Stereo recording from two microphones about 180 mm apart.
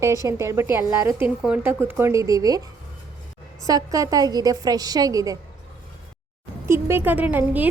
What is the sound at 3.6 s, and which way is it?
A woman's voice, 20° right (ahead or behind).